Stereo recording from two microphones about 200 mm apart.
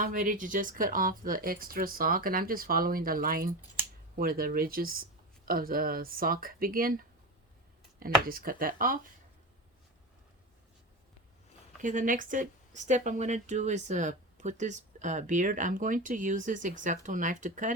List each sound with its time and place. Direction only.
0.0 s speech: 40° right (ahead or behind)
8.3 s speech: 45° right (ahead or behind)
11.8 s speech: 40° right (ahead or behind)